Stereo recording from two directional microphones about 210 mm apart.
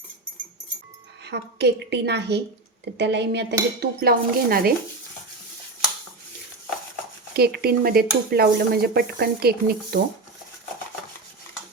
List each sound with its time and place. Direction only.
1.2 s speech: 55° right (ahead or behind)
7.3 s speech: 50° right (ahead or behind)